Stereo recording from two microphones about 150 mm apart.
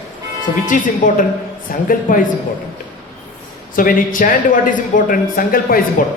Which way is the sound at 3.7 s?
65° left (ahead or behind).